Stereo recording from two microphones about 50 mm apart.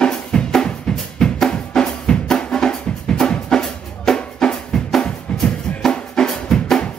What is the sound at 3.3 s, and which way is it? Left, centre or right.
Music, centre.